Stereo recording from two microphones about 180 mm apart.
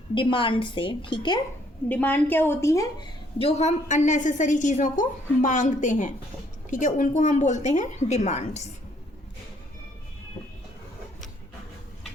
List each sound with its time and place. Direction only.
0.1 s a woman's voice: 30° left (ahead or behind)
1.9 s a woman's voice: 10° left (ahead or behind)
3.3 s a woman's voice: 35° left (ahead or behind)